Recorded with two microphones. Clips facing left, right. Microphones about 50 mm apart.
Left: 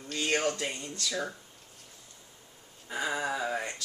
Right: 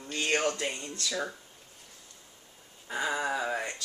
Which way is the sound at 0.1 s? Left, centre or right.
Centre.